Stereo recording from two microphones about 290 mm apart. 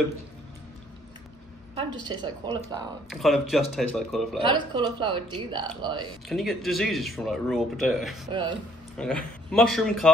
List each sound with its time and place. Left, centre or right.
1.8 s speech: centre
3.1 s speech: centre
4.4 s speech: centre
6.2 s speech: centre
8.3 s speech: centre
8.9 s speech: centre